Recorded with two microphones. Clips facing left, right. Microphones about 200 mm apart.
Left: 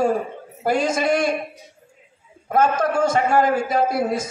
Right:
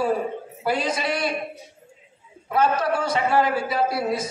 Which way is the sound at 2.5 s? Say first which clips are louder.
Left 2 dB; 45° left (ahead or behind).